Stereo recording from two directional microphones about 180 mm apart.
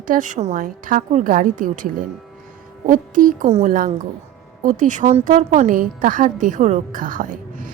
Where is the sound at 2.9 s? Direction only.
45° right (ahead or behind).